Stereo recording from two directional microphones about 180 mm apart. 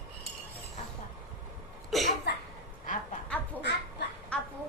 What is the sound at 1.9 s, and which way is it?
Cough, centre (ahead or behind).